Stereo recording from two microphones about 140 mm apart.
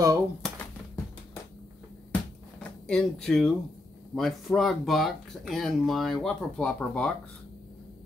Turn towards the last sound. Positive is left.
turn(degrees=5)  # may be behind; listen again after turning